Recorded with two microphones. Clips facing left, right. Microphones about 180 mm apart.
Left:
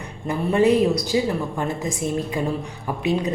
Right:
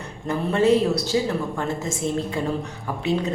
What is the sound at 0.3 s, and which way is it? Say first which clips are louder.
A woman's voice: left 1 dB; 15° left (ahead or behind).